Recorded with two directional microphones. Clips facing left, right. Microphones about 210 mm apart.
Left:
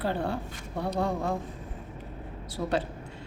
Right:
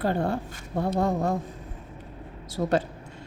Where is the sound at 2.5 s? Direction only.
45° right (ahead or behind).